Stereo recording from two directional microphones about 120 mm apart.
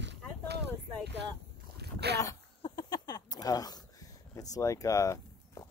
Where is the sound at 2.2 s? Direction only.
30° left (ahead or behind).